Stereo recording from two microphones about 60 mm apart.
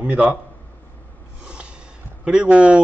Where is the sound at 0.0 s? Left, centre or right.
Right.